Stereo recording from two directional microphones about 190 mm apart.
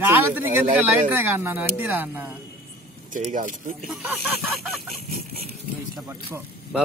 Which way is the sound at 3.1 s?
40° right (ahead or behind).